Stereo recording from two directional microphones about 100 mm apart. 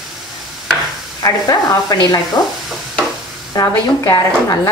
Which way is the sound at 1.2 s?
35° left (ahead or behind).